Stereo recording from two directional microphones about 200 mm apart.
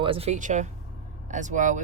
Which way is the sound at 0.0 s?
30° right (ahead or behind).